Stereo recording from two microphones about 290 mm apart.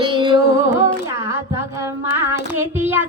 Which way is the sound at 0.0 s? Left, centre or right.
Centre.